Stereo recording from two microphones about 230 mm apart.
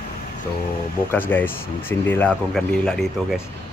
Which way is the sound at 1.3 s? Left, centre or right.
Centre.